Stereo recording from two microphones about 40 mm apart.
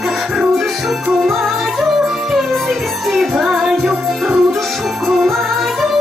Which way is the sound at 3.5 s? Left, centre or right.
Centre.